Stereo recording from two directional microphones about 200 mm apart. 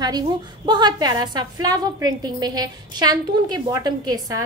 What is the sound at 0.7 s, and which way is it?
A woman's voice, 20° right (ahead or behind).